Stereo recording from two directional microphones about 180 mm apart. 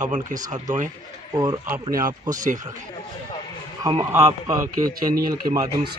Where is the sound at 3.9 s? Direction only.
15° right (ahead or behind).